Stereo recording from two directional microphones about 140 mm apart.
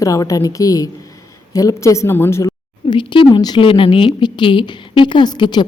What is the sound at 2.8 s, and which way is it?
A woman's voice, 35° left (ahead or behind).